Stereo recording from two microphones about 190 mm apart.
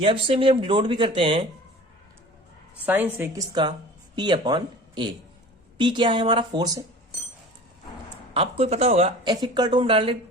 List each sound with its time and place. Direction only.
0.0 s speech: 30° right (ahead or behind)
2.8 s a woman's voice: 10° right (ahead or behind)
3.5 s speech: 25° right (ahead or behind)
8.3 s speech: 30° right (ahead or behind)
9.3 s speech: 20° right (ahead or behind)